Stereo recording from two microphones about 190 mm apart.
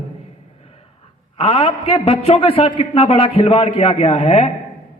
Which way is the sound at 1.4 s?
30° left (ahead or behind).